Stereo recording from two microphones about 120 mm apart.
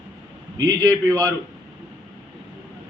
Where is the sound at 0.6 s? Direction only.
30° right (ahead or behind).